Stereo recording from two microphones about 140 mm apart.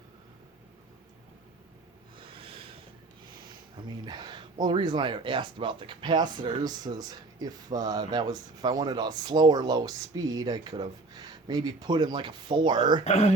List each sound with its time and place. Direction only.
3.8 s speech: 30° right (ahead or behind)
13.1 s speech: 50° left (ahead or behind)